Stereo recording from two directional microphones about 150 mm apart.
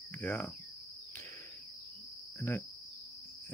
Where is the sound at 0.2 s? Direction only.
10° left (ahead or behind).